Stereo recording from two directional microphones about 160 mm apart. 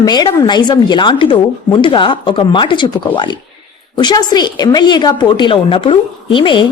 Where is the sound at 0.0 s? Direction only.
25° left (ahead or behind).